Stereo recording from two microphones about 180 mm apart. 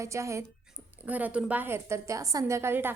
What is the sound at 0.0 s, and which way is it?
A woman's voice, 15° right (ahead or behind).